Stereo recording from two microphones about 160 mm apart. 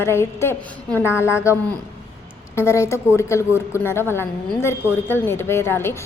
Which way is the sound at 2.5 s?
15° left (ahead or behind).